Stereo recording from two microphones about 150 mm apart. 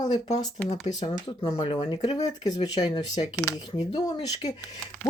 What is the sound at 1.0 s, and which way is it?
Speech, 30° left (ahead or behind).